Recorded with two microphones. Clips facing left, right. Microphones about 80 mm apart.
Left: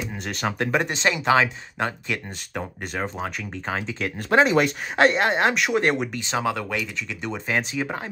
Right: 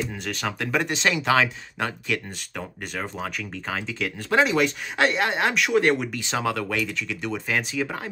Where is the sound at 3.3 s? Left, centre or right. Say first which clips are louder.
Left 2 dB; left.